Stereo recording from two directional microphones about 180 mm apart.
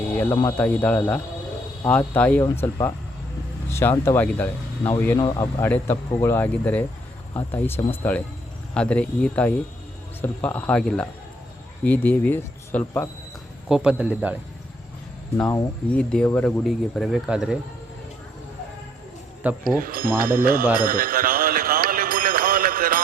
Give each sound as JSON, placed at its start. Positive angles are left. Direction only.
{"t": 0.1, "sound": "speech", "side_deg": 10}
{"t": 13.7, "sound": "speech", "side_deg": -5}
{"t": 15.4, "sound": "speech", "side_deg": 10}
{"t": 19.4, "sound": "speech", "side_deg": -10}
{"t": 19.8, "sound": "speech", "side_deg": -55}
{"t": 20.7, "sound": "a sound", "side_deg": -50}